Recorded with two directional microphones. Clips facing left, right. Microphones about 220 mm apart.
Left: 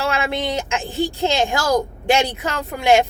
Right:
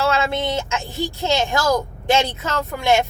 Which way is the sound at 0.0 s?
15° left (ahead or behind).